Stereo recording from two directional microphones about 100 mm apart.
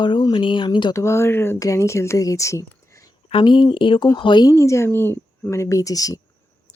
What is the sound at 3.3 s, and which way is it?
Speech, 60° left (ahead or behind).